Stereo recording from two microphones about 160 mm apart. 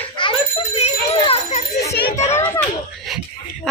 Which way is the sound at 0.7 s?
40° left (ahead or behind).